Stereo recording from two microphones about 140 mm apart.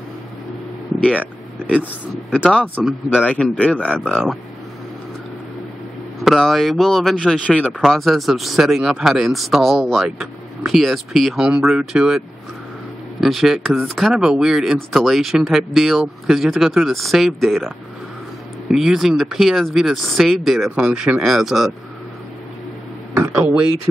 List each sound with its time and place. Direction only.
0.9 s speech: 10° left (ahead or behind)
2.8 s speech: centre (ahead or behind)
3.2 s speech: 10° left (ahead or behind)
6.2 s speech: centre (ahead or behind)
13.2 s speech: centre (ahead or behind)
23.1 s a sound: 20° right (ahead or behind)